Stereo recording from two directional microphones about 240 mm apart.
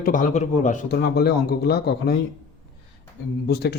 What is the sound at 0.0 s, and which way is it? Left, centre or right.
Speech, left.